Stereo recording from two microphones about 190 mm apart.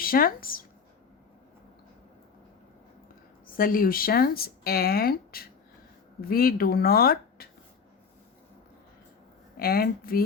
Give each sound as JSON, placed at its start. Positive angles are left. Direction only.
{"t": 0.0, "sound": "speech", "side_deg": 50}
{"t": 3.4, "sound": "speech", "side_deg": 50}
{"t": 9.6, "sound": "speech", "side_deg": 50}